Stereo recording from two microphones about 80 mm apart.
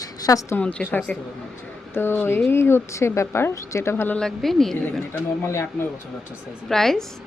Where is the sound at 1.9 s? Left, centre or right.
Left.